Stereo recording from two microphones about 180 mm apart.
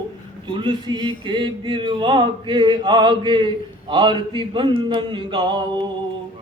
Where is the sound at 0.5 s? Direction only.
25° right (ahead or behind).